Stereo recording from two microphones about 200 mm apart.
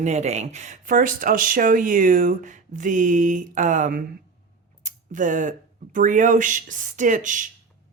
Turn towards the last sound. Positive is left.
turn(degrees=-40)  # may be behind; listen again after turning